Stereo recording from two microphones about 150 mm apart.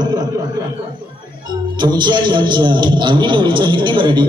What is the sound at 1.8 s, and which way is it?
A man's voice, 30° right (ahead or behind).